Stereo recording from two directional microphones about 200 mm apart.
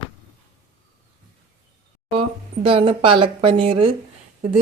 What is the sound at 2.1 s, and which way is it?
Speech, 30° right (ahead or behind).